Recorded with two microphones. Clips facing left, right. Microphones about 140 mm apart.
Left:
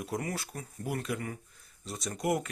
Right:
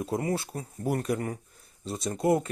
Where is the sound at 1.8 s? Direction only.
25° right (ahead or behind).